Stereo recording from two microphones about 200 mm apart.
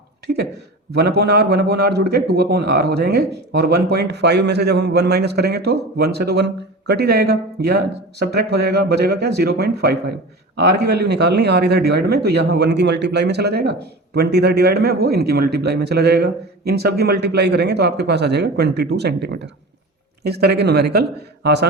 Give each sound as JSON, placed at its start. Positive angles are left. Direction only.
{"t": 0.9, "sound": "a man's voice", "side_deg": -55}